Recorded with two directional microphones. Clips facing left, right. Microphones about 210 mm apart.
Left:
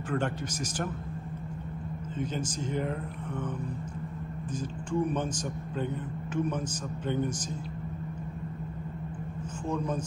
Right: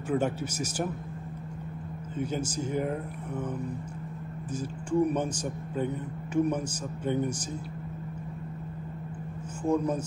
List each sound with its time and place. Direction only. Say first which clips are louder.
2.1 s a man's voice: right 3 dB; 10° right (ahead or behind)
5.0 s a man's voice: right 2 dB; 10° right (ahead or behind)
6.3 s a man's voice: right 4 dB; 10° right (ahead or behind)
9.7 s a man's voice: right 5 dB; 10° right (ahead or behind)